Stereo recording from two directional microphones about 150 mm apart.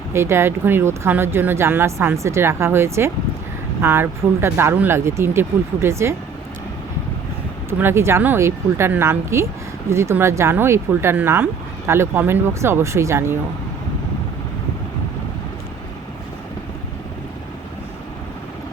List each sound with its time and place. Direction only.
0.1 s speech: 15° right (ahead or behind)
7.7 s speech: 15° right (ahead or behind)